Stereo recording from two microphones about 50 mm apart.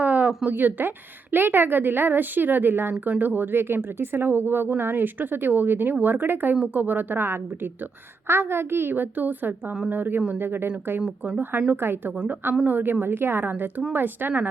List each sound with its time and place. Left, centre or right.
0.0 s a sound: right
0.4 s a woman's voice: right
11.7 s a woman's voice: right